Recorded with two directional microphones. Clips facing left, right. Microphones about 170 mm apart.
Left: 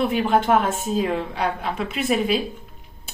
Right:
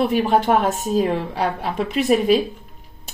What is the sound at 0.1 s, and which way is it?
A woman's voice, 40° right (ahead or behind).